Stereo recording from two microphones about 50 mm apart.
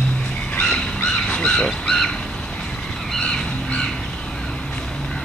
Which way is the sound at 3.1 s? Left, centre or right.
Centre.